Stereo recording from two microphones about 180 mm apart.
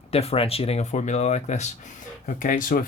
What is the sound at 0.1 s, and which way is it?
Speech, 35° left (ahead or behind).